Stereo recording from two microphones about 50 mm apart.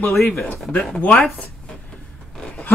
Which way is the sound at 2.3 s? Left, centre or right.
Centre.